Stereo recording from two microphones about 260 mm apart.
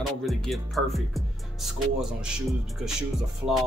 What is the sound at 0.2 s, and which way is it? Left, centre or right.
Speech, centre.